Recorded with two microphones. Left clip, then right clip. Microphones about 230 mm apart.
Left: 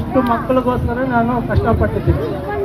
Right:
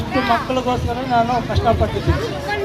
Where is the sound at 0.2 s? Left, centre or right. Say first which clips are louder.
Left 3 dB; right.